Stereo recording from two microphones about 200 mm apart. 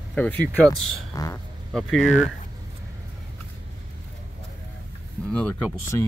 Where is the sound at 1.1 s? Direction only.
15° left (ahead or behind).